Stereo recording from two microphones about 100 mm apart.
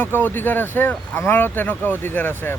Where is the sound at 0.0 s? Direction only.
20° left (ahead or behind).